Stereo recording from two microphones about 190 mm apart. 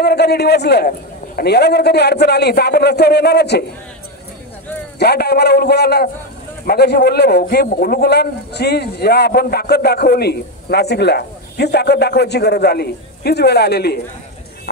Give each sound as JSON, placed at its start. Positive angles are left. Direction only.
{"t": 0.0, "sound": "a man's voice", "side_deg": 60}
{"t": 4.9, "sound": "a man's voice", "side_deg": 60}